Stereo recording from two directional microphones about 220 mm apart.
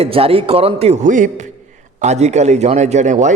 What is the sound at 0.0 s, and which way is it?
A man's voice, 25° right (ahead or behind).